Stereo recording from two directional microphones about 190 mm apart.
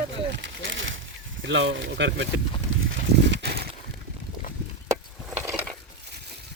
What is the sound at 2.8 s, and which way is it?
Livestock, 70° right (ahead or behind).